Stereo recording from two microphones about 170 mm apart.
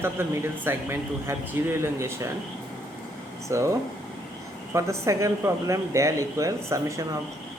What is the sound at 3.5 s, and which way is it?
Speech, 15° right (ahead or behind).